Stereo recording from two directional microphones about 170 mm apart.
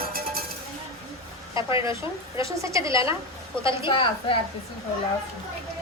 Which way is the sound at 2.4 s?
20° right (ahead or behind).